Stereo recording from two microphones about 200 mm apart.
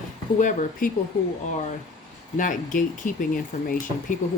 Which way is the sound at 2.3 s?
40° left (ahead or behind).